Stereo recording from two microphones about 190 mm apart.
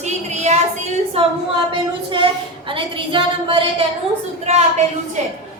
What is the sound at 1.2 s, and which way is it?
Speech, 30° right (ahead or behind).